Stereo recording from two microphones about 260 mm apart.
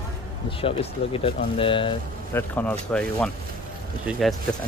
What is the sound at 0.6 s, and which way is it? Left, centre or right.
Speech, left.